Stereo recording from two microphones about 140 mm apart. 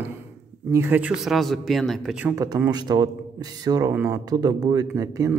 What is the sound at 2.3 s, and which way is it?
Speech, 25° right (ahead or behind).